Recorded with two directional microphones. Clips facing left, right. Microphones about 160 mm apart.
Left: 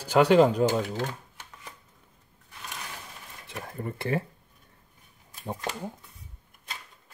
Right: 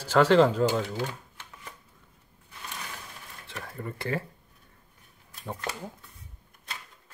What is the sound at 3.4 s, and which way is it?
Speech, 20° left (ahead or behind).